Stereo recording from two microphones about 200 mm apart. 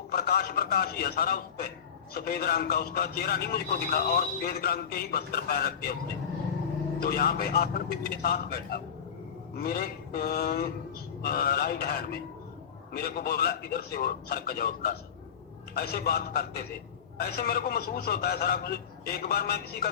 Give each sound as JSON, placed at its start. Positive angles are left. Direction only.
{"t": 0.1, "sound": "a man's voice", "side_deg": 50}
{"t": 7.0, "sound": "a man's voice", "side_deg": 50}